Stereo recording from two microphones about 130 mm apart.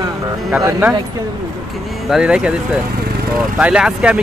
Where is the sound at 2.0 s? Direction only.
5° right (ahead or behind).